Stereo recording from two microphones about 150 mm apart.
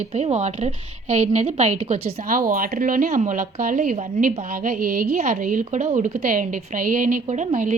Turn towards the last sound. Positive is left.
turn(degrees=-50)  # may be behind; listen again after turning